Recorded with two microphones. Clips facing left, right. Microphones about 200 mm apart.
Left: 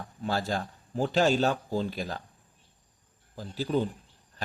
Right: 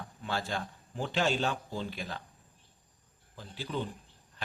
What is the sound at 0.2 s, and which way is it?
A man's voice, 40° left (ahead or behind).